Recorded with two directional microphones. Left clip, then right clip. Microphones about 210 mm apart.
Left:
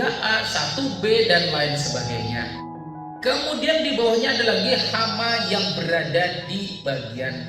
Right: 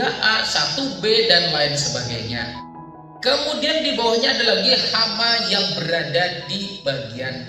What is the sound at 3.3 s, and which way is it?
A man's voice, 40° right (ahead or behind).